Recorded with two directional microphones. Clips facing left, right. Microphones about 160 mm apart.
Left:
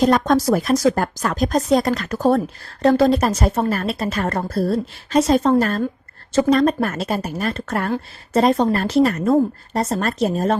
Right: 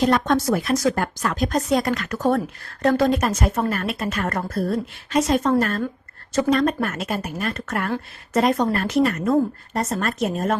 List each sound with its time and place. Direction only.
0.0 s a woman's voice: 40° left (ahead or behind)